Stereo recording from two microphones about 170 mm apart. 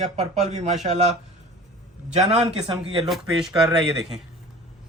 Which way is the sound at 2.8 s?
25° right (ahead or behind).